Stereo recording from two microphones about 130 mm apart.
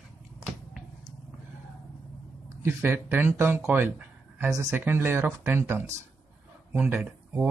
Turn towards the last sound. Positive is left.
turn(degrees=-15)  # may be behind; listen again after turning